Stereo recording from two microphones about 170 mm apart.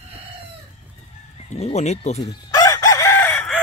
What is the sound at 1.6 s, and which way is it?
Speech, 40° left (ahead or behind).